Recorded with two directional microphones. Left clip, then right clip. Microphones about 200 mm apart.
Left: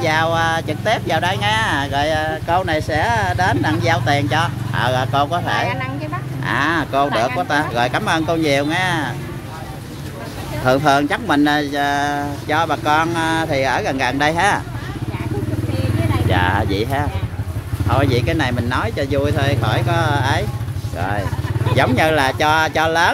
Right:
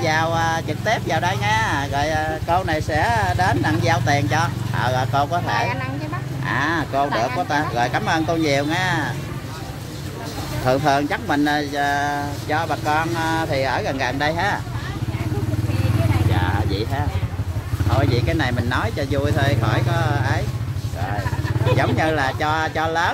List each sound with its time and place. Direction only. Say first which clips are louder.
0.0 s speech: left 3 dB; 20° left (ahead or behind)
10.6 s speech: left 4 dB; 20° left (ahead or behind)
16.3 s vehicle: left 6 dB; 30° left (ahead or behind)
17.9 s speech: left 4 dB; 25° left (ahead or behind)
21.7 s speech: left 6 dB; 45° left (ahead or behind)